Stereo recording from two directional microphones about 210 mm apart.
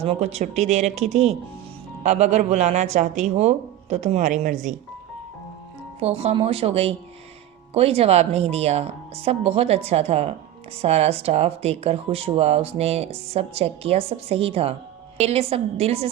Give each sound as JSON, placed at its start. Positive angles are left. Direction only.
{"t": 0.0, "sound": "speech", "side_deg": -30}
{"t": 6.0, "sound": "speech", "side_deg": -30}